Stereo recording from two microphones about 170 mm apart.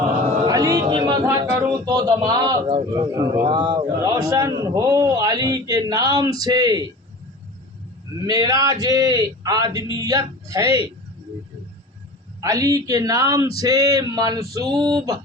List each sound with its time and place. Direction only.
0.4 s music: 20° right (ahead or behind)
1.8 s a man's voice: 25° right (ahead or behind)
8.3 s a man's voice: 20° right (ahead or behind)
12.4 s a man's voice: 20° right (ahead or behind)